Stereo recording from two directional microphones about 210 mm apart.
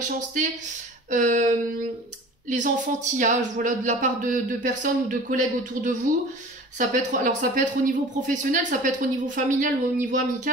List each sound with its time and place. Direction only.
1.1 s speech: 35° right (ahead or behind)